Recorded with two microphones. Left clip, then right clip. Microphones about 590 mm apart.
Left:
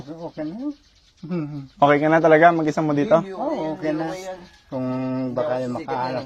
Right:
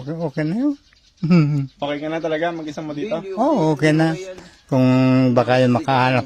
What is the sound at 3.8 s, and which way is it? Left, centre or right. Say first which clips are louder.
Speech: right 7 dB; right.